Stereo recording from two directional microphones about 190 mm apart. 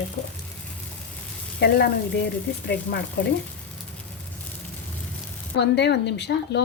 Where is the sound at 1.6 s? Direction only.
60° left (ahead or behind).